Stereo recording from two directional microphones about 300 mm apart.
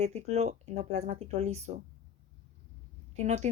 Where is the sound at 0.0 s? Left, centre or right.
Right.